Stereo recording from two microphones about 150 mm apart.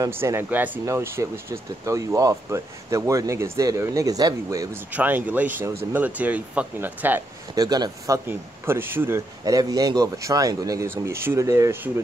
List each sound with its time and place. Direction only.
0.0 s speech: 15° right (ahead or behind)
4.9 s speech: 10° right (ahead or behind)
7.5 s speech: 25° right (ahead or behind)
8.3 s speech: 15° right (ahead or behind)